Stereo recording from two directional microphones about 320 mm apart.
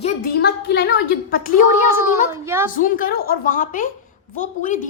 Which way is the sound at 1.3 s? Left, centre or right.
Left.